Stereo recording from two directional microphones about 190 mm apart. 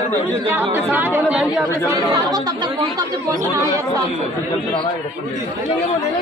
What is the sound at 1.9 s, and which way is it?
Speech, 20° right (ahead or behind).